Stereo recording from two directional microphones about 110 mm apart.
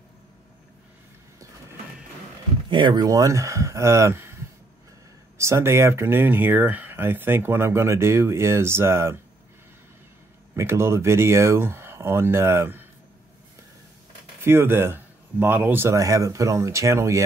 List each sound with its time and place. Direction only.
2.7 s speech: 45° right (ahead or behind)
3.1 s speech: 30° right (ahead or behind)
5.4 s speech: 25° right (ahead or behind)
10.5 s speech: 25° right (ahead or behind)
14.4 s speech: 20° right (ahead or behind)